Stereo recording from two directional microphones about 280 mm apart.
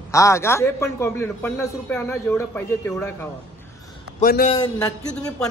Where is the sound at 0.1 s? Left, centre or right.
Centre.